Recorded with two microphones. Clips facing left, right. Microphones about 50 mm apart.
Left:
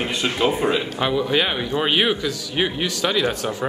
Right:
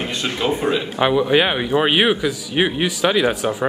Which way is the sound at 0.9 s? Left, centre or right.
Centre.